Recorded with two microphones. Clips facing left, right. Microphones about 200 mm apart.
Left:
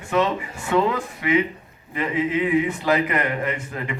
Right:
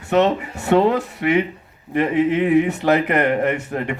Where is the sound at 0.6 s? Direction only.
65° right (ahead or behind).